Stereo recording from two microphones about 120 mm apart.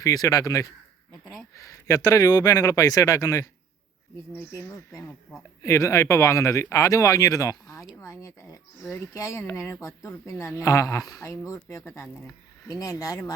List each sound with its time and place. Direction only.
0.0 s speech: 30° left (ahead or behind)